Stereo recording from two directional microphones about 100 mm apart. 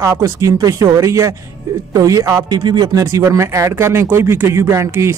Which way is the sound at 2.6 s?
45° right (ahead or behind).